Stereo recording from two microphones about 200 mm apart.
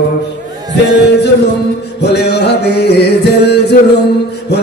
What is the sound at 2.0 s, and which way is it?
Music, 55° left (ahead or behind).